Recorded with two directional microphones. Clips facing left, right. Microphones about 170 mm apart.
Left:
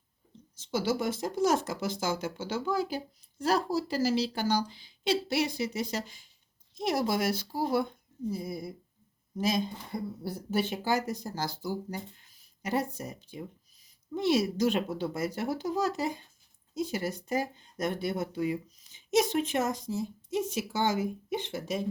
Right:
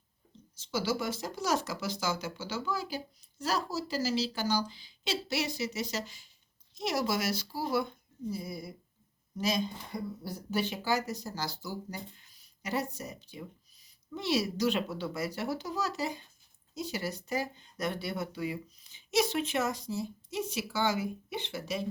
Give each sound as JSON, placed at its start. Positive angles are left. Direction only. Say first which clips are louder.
{"t": 0.5, "sound": "speech", "louder": "left 3 dB", "side_deg": 50}